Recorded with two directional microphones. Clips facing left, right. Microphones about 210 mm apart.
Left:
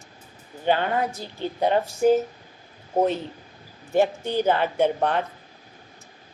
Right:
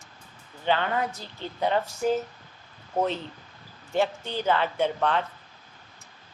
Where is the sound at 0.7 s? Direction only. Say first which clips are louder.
Left 3 dB; 40° left (ahead or behind).